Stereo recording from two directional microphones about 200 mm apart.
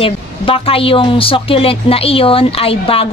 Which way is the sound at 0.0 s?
25° left (ahead or behind).